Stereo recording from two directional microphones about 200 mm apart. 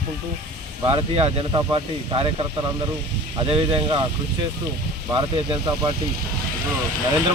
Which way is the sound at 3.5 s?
30° right (ahead or behind).